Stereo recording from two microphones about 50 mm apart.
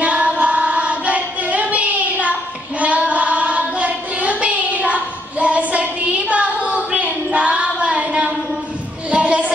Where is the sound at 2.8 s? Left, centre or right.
Right.